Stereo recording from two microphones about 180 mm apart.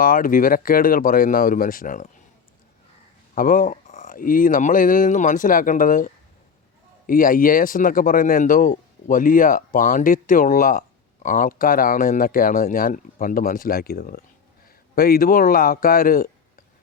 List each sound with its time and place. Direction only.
0.0 s speech: 50° left (ahead or behind)
3.3 s speech: 50° left (ahead or behind)
7.1 s speech: 50° left (ahead or behind)